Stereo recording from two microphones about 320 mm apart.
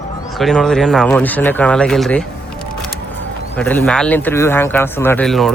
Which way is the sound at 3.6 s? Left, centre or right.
Centre.